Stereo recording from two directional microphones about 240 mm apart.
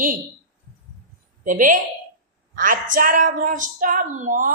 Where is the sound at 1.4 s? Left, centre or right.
Right.